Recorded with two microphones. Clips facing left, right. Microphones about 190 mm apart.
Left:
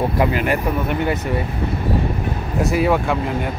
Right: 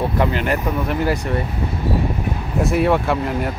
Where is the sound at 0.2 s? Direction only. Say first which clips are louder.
Left 1 dB; 10° left (ahead or behind).